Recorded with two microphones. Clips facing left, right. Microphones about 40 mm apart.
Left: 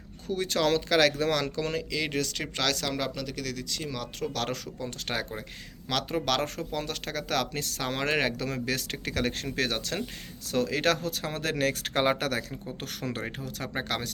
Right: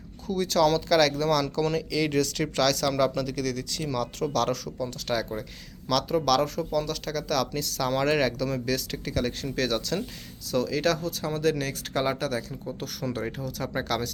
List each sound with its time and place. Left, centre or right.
0.3 s speech: left
3.2 s speech: centre; by 8.4 s left
8.4 s speech: left
9.6 s speech: left
12.8 s speech: left